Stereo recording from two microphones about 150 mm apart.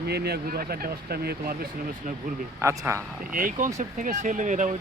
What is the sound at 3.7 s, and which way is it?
Speech, 55° right (ahead or behind).